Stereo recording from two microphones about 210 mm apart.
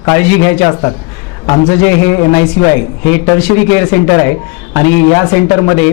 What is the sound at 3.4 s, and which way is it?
A man's voice, 20° left (ahead or behind).